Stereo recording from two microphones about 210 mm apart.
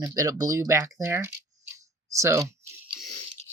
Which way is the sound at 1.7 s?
15° right (ahead or behind).